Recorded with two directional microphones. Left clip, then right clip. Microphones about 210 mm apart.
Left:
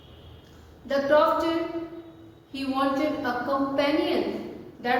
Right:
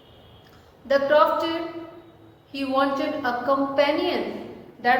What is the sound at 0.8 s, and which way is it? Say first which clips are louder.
Speech: right 3 dB; 20° right (ahead or behind).